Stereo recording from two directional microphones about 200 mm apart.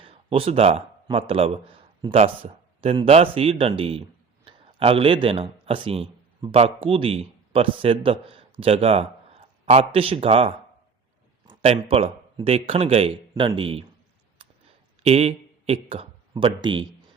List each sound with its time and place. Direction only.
0.0 s a man's voice: 30° right (ahead or behind)
15.0 s speech: 30° right (ahead or behind)